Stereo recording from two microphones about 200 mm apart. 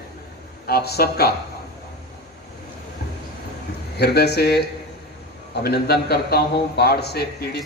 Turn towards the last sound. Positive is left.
turn(degrees=50)  # may be behind; listen again after turning